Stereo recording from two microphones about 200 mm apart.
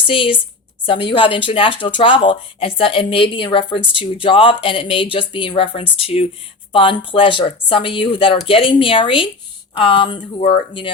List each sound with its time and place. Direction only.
0.1 s speech: 25° left (ahead or behind)